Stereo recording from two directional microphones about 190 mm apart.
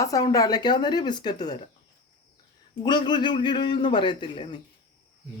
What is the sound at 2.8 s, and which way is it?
A man's voice, 25° left (ahead or behind).